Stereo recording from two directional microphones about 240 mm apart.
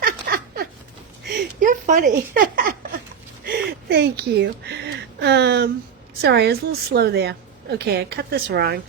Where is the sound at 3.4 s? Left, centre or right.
Right.